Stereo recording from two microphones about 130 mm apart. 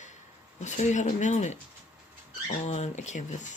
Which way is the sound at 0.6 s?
65° left (ahead or behind).